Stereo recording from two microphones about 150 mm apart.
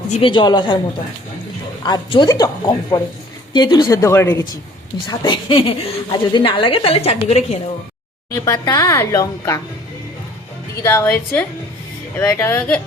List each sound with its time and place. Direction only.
0.1 s a woman's voice: 35° left (ahead or behind)
1.8 s a woman's voice: 30° left (ahead or behind)
5.0 s a woman's voice: 35° left (ahead or behind)
8.3 s a woman's voice: 25° left (ahead or behind)
10.8 s a woman's voice: 15° left (ahead or behind)